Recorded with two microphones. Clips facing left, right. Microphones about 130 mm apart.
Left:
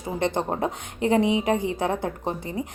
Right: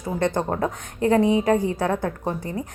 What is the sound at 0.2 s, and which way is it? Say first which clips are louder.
A woman's voice: right 2 dB; 20° left (ahead or behind).